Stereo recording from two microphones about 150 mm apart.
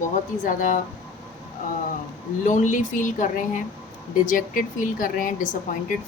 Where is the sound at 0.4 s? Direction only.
60° left (ahead or behind).